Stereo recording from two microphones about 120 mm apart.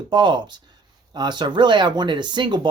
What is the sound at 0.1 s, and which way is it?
Speech, 40° right (ahead or behind).